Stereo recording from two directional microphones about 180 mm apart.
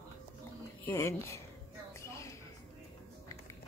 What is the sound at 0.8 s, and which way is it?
Speech, 15° left (ahead or behind).